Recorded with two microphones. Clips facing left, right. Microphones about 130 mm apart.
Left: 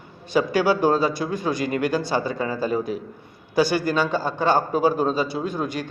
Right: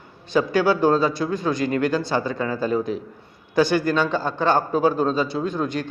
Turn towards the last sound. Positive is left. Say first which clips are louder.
# right 2 dB
turn(degrees=10)  # may be behind; listen again after turning